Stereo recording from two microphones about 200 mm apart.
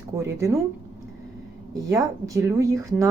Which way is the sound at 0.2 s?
15° right (ahead or behind).